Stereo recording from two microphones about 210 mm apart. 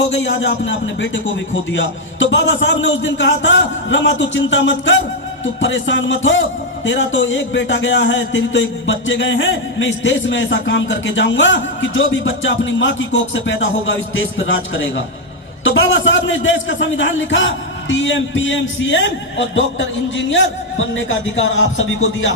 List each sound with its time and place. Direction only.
0.1 s a man's voice: 60° left (ahead or behind)